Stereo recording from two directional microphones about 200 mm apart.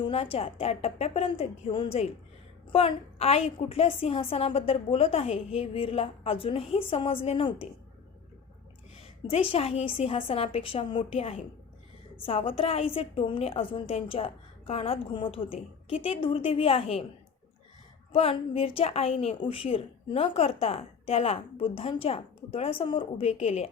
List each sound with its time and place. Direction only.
0.0 s a woman's voice: 30° left (ahead or behind)
9.3 s a woman's voice: 30° left (ahead or behind)
18.1 s a woman's voice: 30° left (ahead or behind)